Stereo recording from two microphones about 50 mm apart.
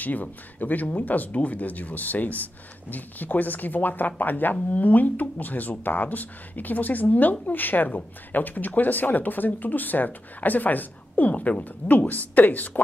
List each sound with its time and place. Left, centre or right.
0.0 s speech: left